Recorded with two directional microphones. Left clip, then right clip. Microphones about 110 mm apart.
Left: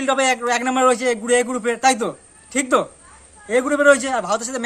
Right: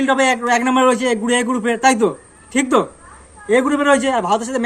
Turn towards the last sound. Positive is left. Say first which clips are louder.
# right 4 dB
turn(degrees=50)  # may be behind; listen again after turning